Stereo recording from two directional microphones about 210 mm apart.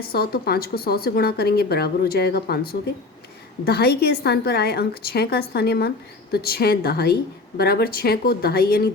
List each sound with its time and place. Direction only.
0.1 s speech: 50° left (ahead or behind)